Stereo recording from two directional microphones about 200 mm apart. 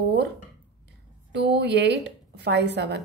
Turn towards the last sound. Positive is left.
turn(degrees=-60)  # may be behind; listen again after turning